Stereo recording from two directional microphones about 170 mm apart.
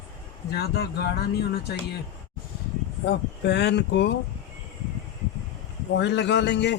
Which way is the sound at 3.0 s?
90° left.